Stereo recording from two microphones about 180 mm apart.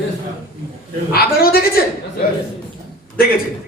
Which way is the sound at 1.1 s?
55° left (ahead or behind).